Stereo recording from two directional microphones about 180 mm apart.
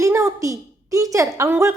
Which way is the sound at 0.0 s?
15° right (ahead or behind).